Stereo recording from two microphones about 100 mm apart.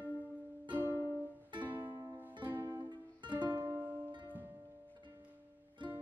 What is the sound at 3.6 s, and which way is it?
Music, 20° right (ahead or behind).